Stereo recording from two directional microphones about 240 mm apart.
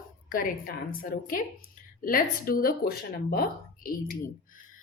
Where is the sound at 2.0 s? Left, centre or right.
Left.